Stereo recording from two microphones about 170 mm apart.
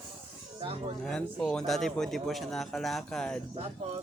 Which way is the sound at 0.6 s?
35° right (ahead or behind).